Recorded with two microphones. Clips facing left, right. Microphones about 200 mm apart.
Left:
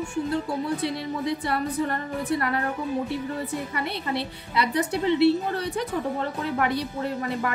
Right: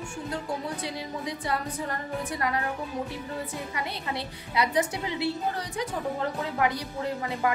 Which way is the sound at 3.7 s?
65° left (ahead or behind).